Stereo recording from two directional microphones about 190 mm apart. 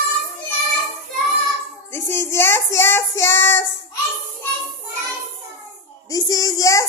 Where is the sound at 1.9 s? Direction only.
10° left (ahead or behind).